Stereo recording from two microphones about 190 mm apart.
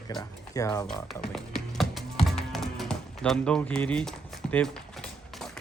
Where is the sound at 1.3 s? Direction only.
Centre (ahead or behind).